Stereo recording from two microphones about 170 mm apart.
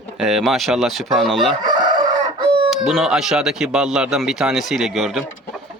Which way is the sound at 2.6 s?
Centre (ahead or behind).